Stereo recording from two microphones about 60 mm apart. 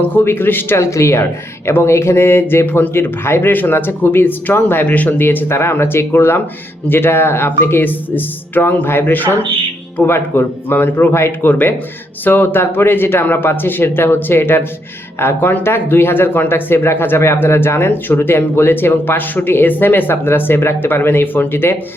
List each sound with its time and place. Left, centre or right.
0.1 s speech: left
0.8 s speech: left
5.5 s speech: left